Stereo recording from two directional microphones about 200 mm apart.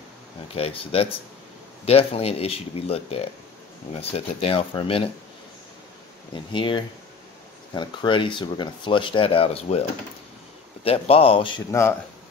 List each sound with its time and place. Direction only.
0.6 s speech: 30° left (ahead or behind)
6.5 s speech: 25° left (ahead or behind)